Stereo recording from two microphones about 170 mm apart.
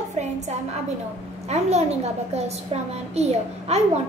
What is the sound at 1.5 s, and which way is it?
A woman's voice, 40° right (ahead or behind).